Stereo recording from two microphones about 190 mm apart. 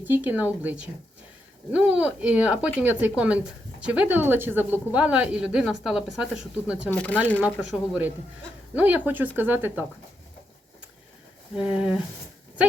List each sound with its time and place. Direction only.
0.0 s speech: 10° right (ahead or behind)
6.9 s speech: 5° left (ahead or behind); by 9.8 s 10° right (ahead or behind)
11.5 s speech: 5° right (ahead or behind)